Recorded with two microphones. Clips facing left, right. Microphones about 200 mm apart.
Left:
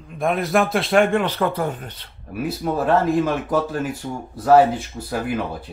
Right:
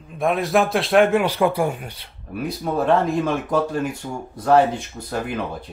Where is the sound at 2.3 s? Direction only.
5° left (ahead or behind).